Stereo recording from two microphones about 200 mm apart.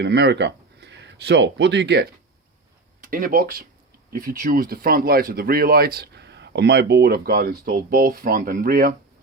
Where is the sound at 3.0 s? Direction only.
40° right (ahead or behind).